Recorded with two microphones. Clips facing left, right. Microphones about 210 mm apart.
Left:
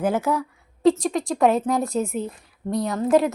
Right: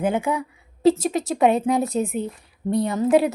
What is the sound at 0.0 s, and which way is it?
A woman's voice, 5° left (ahead or behind).